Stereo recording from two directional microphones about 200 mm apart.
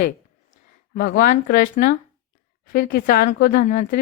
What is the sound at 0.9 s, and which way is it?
Speech, 45° left (ahead or behind).